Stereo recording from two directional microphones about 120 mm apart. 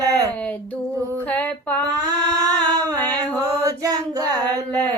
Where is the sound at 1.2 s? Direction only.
15° left (ahead or behind).